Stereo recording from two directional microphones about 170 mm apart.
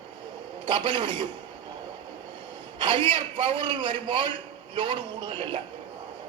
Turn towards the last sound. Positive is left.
turn(degrees=-30)  # may be behind; listen again after turning